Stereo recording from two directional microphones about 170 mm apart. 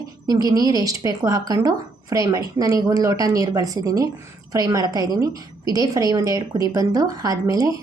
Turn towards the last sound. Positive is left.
turn(degrees=-20)  # may be behind; listen again after turning